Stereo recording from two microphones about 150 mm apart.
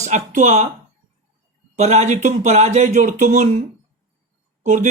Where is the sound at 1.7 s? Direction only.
50° right (ahead or behind).